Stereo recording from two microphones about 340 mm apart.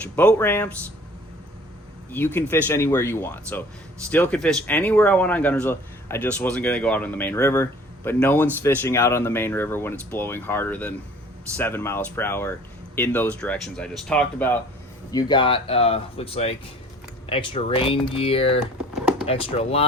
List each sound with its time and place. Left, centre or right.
0.2 s speech: centre
2.1 s speech: centre